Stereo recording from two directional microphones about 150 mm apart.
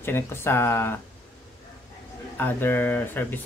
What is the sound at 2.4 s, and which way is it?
Speech, 15° left (ahead or behind).